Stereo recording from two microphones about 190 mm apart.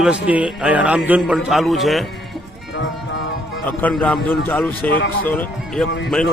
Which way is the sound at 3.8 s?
5° left (ahead or behind).